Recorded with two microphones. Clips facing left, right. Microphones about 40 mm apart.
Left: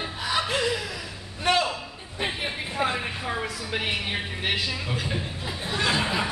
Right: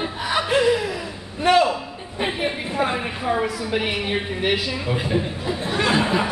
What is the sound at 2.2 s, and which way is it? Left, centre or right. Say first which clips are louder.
A woman's voice: right 5 dB; centre.